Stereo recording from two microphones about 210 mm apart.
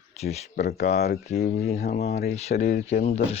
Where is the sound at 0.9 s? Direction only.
50° left (ahead or behind).